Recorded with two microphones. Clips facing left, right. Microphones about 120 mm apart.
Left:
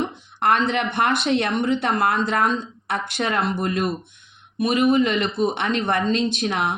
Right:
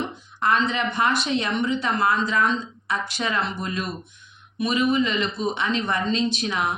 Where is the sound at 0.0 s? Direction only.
60° left (ahead or behind).